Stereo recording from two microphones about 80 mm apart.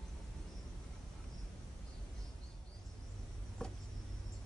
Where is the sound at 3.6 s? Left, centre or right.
Centre.